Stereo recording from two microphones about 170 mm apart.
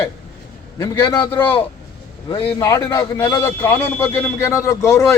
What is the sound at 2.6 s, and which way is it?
A man's voice, 20° left (ahead or behind).